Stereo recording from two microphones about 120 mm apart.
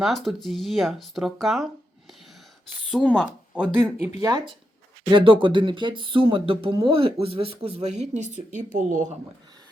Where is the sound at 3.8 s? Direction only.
15° right (ahead or behind).